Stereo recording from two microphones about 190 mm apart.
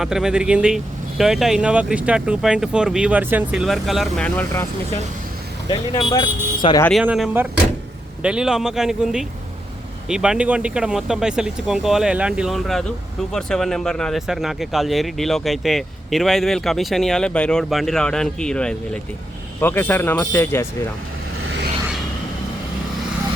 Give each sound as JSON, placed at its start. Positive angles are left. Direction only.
{"t": 0.0, "sound": "speech", "side_deg": -5}
{"t": 5.6, "sound": "speech", "side_deg": 20}
{"t": 7.0, "sound": "speech", "side_deg": -5}